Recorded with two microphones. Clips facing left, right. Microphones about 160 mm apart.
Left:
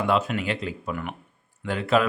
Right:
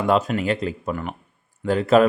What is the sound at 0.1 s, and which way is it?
Speech, 40° right (ahead or behind).